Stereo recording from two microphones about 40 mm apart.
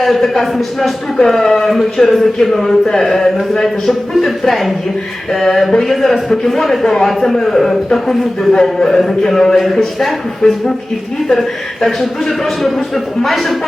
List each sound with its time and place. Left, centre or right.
0.0 s a man's voice: centre
4.3 s a man's voice: centre